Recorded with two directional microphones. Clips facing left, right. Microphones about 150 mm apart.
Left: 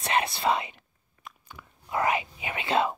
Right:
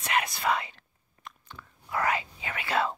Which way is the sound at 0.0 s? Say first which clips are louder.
Left 3 dB; 30° left (ahead or behind).